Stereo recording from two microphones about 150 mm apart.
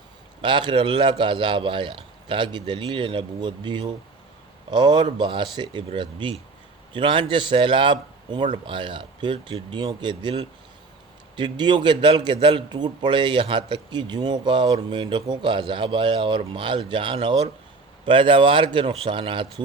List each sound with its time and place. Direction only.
0.4 s a man's voice: 30° right (ahead or behind)